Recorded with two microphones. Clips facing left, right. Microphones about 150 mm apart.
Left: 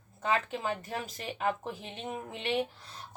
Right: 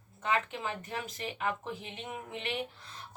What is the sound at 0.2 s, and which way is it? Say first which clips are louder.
Speech: left 2 dB; 35° left (ahead or behind).